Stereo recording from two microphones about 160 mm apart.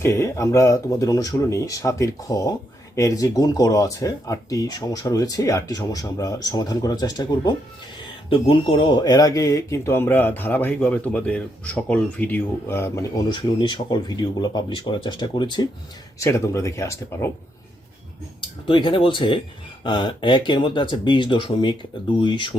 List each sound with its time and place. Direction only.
0.0 s speech: 15° left (ahead or behind)
8.3 s speech: 35° left (ahead or behind); by 17.3 s 20° left (ahead or behind)
18.3 s speech: 30° left (ahead or behind)